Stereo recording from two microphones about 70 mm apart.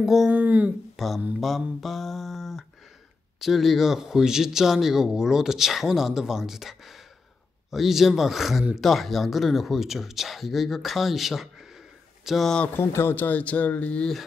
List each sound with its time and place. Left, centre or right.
0.0 s speech: centre
0.3 s speech: right
0.9 s mantra: centre
1.4 s speech: centre
12.7 s speech: left